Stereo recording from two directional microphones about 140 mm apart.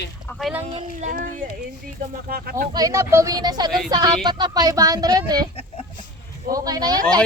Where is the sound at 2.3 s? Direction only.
90° right.